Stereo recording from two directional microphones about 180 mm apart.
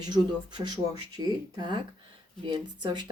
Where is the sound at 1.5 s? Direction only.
25° right (ahead or behind).